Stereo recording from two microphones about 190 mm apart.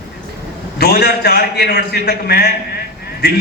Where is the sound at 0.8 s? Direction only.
55° left (ahead or behind).